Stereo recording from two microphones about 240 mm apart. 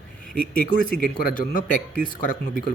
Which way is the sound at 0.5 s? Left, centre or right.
Left.